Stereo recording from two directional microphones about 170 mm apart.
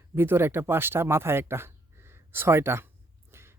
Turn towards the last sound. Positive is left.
turn(degrees=-15)  # may be behind; listen again after turning